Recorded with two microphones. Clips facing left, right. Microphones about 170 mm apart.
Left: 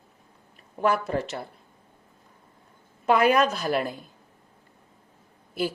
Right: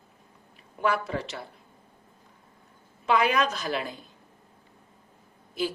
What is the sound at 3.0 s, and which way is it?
Speech, 50° left (ahead or behind).